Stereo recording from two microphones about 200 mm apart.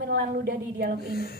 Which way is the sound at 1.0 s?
50° left (ahead or behind).